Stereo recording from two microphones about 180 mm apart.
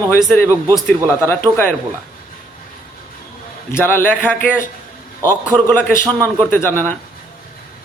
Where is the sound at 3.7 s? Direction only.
10° left (ahead or behind).